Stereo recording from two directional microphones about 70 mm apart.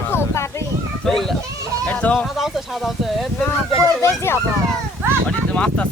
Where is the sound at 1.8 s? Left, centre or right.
Centre.